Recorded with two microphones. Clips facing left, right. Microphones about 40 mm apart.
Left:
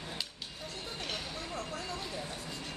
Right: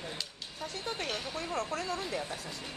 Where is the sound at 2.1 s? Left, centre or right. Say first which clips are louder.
Right 3 dB; right.